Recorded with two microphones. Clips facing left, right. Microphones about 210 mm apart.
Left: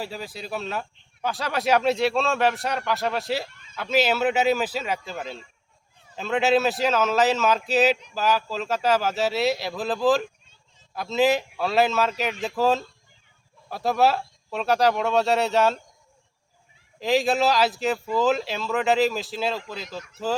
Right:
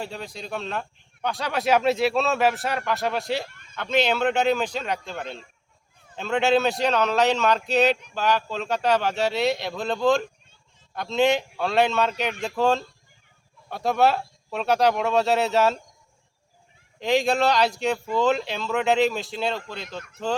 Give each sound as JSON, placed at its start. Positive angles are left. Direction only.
{"t": 0.0, "sound": "speech", "side_deg": 5}
{"t": 3.5, "sound": "a sound", "side_deg": -55}
{"t": 3.8, "sound": "speech", "side_deg": 5}
{"t": 17.0, "sound": "speech", "side_deg": 0}